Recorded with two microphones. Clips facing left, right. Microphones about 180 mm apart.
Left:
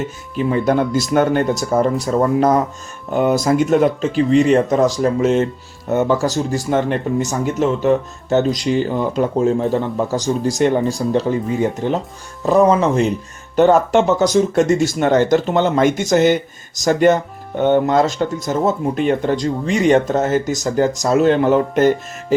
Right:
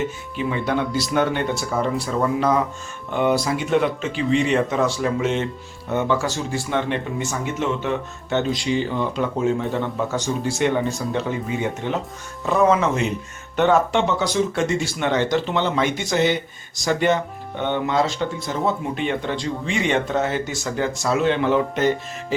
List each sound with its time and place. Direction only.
0.3 s speech: 40° left (ahead or behind)